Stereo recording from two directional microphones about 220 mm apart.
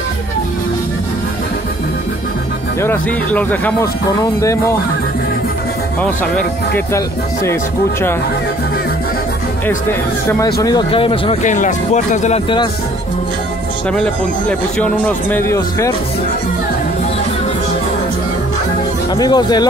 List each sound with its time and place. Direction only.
2.8 s speech: 10° left (ahead or behind)
6.3 s speech: 10° left (ahead or behind)
10.4 s speech: 15° left (ahead or behind)
11.5 s speech: 35° left (ahead or behind)
14.8 s speech: 5° left (ahead or behind)
19.1 s speech: 20° left (ahead or behind)